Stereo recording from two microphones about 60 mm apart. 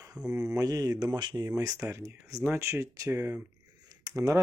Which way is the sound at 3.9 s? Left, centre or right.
Right.